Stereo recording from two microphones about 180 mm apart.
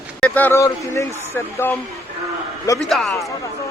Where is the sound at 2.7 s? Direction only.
Centre (ahead or behind).